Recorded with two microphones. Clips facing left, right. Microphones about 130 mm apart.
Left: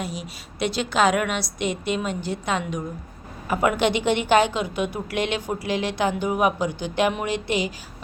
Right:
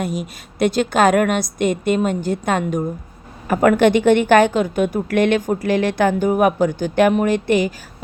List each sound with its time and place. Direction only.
0.0 s a woman's voice: 50° right (ahead or behind)